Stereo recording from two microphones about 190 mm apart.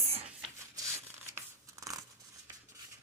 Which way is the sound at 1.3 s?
15° right (ahead or behind).